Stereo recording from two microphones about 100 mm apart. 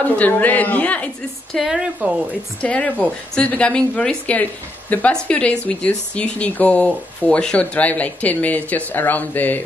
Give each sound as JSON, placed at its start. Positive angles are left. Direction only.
{"t": 0.0, "sound": "speech", "side_deg": 15}
{"t": 1.6, "sound": "a woman's voice", "side_deg": -5}
{"t": 2.6, "sound": "speech", "side_deg": 10}